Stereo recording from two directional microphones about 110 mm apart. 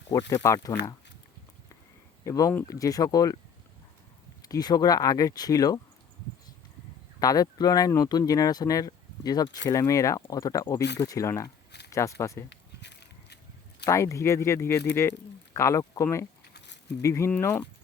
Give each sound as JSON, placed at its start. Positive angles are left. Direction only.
{"t": 0.1, "sound": "speech", "side_deg": 35}
{"t": 2.2, "sound": "speech", "side_deg": 30}
{"t": 4.4, "sound": "speech", "side_deg": 35}
{"t": 7.2, "sound": "speech", "side_deg": 35}
{"t": 13.8, "sound": "speech", "side_deg": 25}